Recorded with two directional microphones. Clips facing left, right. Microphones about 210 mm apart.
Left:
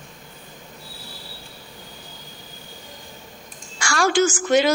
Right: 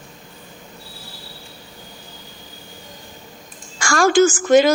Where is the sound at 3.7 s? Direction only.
45° right (ahead or behind).